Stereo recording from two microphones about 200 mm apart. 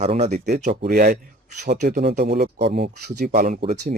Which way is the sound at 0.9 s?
45° right (ahead or behind).